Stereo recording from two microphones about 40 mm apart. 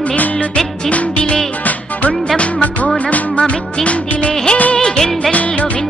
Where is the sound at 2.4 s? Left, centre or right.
Left.